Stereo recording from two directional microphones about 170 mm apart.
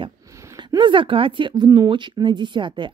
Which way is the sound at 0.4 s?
20° right (ahead or behind).